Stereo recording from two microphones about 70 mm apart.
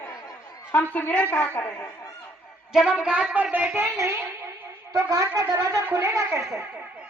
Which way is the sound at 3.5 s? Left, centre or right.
Right.